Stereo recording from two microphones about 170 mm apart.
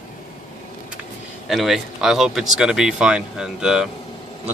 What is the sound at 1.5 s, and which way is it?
Speech, centre (ahead or behind).